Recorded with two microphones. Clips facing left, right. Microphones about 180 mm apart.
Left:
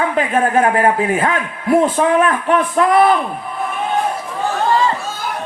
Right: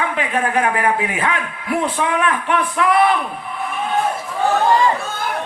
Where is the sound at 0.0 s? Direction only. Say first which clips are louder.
Left 4 dB; 40° left (ahead or behind).